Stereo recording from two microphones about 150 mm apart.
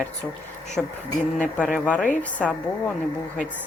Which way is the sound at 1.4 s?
5° left (ahead or behind).